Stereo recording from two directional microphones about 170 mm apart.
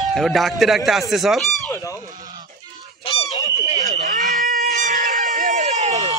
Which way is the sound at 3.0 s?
35° left (ahead or behind).